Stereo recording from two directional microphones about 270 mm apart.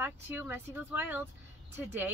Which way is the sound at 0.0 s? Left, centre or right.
Centre.